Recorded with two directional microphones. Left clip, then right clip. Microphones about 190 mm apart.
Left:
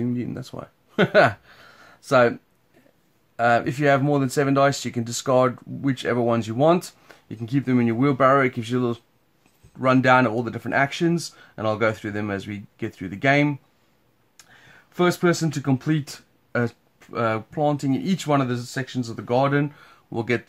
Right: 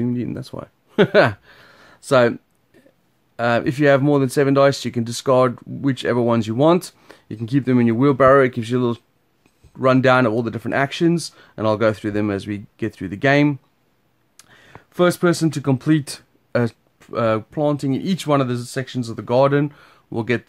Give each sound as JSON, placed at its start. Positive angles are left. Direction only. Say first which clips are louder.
{"t": 0.0, "sound": "speech", "louder": "right 4 dB", "side_deg": -35}
{"t": 3.3, "sound": "speech", "louder": "right 1 dB", "side_deg": -40}